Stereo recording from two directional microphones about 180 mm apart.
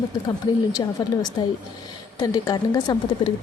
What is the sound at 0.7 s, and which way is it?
A woman's voice, 20° left (ahead or behind).